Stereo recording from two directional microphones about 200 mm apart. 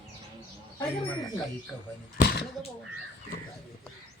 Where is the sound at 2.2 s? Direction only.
55° left (ahead or behind).